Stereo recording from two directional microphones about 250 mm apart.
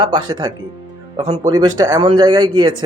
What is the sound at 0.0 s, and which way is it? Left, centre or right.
Speech, centre.